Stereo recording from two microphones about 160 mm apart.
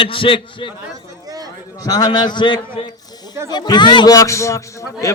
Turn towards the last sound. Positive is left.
turn(degrees=20)  # may be behind; listen again after turning